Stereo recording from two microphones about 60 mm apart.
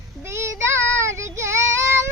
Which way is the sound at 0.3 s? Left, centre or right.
Right.